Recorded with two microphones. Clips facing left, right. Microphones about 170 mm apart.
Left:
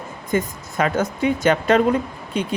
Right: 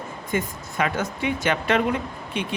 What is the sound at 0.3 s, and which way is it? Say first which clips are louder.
A woman's voice: left 5 dB; 40° left (ahead or behind).